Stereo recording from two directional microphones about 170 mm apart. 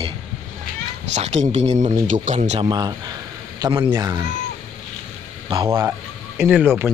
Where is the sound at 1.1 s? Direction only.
40° right (ahead or behind).